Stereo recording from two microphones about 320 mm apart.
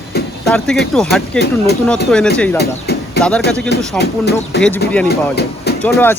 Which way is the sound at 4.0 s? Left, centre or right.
Left.